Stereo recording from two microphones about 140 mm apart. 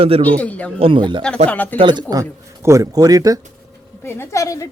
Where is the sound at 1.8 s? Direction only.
35° right (ahead or behind).